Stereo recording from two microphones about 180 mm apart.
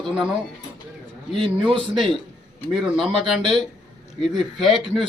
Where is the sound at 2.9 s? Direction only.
Centre (ahead or behind).